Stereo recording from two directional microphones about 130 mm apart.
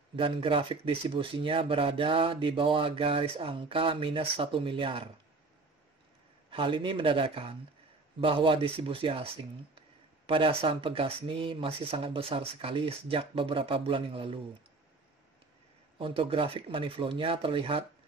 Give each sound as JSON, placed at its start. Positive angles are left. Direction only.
{"t": 0.1, "sound": "speech", "side_deg": -40}
{"t": 6.5, "sound": "speech", "side_deg": -40}
{"t": 16.0, "sound": "speech", "side_deg": -45}